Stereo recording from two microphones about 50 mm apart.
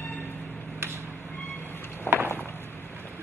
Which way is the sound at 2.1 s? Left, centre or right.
Left.